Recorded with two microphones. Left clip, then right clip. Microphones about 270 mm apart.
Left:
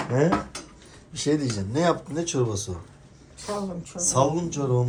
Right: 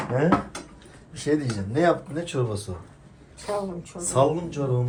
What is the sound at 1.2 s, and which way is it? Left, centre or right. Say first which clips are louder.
A man's voice: even; centre.